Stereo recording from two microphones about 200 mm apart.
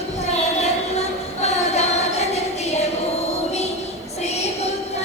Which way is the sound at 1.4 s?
30° left (ahead or behind).